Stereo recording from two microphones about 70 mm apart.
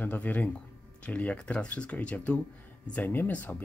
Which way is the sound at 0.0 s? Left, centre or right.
Left.